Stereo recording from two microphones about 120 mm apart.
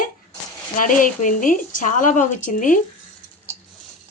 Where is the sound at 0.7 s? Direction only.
90° left.